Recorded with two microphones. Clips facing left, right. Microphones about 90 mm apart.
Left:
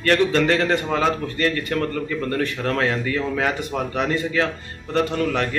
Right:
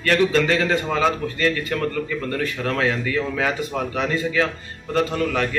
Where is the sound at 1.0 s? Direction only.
40° left (ahead or behind).